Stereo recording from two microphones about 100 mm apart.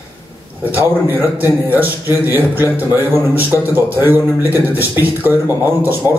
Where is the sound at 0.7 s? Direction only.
20° right (ahead or behind).